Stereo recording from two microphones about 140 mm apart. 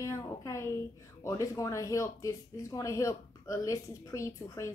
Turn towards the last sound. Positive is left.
turn(degrees=20)  # may be behind; listen again after turning